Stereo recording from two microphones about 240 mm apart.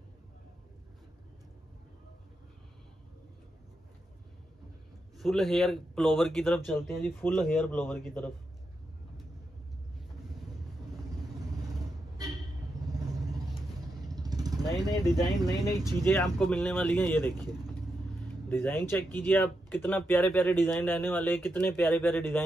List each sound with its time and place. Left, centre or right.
5.1 s speech: centre
14.0 s vehicle: centre
14.7 s mechanisms: centre
15.4 s speech: centre
17.4 s speech: centre
18.5 s speech: centre